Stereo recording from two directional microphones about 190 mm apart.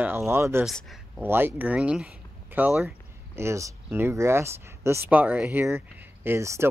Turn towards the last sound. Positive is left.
turn(degrees=-15)  # may be behind; listen again after turning